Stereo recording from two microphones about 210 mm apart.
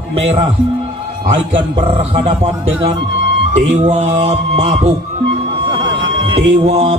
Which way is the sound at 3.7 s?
35° right (ahead or behind).